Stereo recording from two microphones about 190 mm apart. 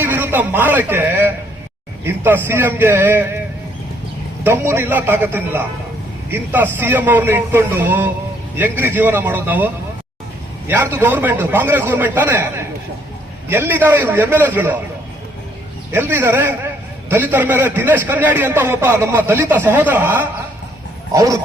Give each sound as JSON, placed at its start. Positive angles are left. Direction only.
{"t": 0.0, "sound": "a man's voice", "side_deg": -10}
{"t": 4.4, "sound": "a man's voice", "side_deg": -15}
{"t": 15.9, "sound": "a man's voice", "side_deg": -10}